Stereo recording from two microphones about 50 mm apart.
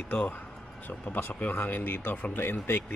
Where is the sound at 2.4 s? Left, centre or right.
Left.